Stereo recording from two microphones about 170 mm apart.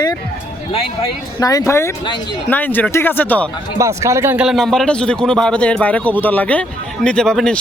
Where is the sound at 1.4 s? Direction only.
20° left (ahead or behind).